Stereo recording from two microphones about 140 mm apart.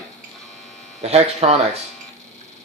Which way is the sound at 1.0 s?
50° right (ahead or behind).